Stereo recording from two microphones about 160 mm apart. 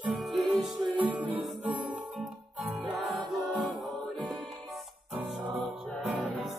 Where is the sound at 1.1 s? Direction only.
5° right (ahead or behind).